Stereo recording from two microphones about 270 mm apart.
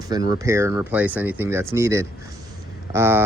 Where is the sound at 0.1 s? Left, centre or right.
Centre.